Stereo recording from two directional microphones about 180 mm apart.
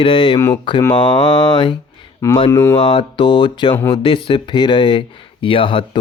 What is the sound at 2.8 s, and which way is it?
Speech, 30° left (ahead or behind).